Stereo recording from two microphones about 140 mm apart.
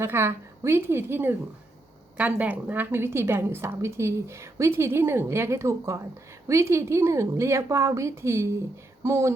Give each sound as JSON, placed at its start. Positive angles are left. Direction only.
{"t": 0.0, "sound": "a woman's voice", "side_deg": -15}